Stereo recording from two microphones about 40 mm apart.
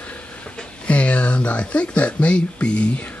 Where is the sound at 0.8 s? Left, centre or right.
Left.